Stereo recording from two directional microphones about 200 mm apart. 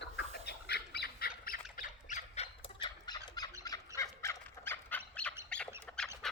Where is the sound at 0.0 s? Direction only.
55° left (ahead or behind).